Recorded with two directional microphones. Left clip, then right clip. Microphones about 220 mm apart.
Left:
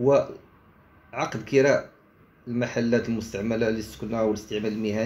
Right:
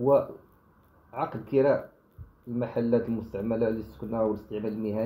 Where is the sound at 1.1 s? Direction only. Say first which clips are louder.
Left 3 dB; centre (ahead or behind).